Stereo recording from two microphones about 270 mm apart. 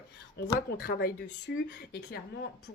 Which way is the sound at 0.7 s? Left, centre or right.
Left.